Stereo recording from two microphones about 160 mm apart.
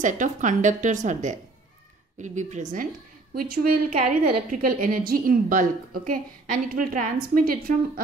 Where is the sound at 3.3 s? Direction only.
70° right (ahead or behind).